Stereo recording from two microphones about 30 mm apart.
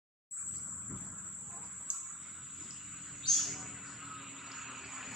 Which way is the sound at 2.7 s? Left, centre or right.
Centre.